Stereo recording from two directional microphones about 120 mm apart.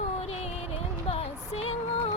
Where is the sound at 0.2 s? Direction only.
55° left (ahead or behind).